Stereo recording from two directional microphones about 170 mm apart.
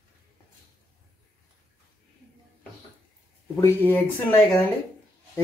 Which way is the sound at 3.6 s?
15° left (ahead or behind).